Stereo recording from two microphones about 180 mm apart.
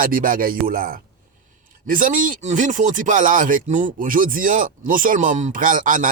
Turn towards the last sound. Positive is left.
turn(degrees=-50)  # may be behind; listen again after turning